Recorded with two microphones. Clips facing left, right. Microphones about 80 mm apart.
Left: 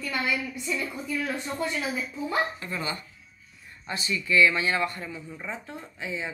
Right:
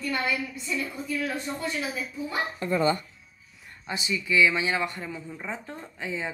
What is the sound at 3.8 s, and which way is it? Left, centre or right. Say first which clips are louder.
Speech: even; centre.